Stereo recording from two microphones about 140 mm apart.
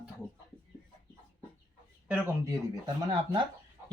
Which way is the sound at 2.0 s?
10° right (ahead or behind).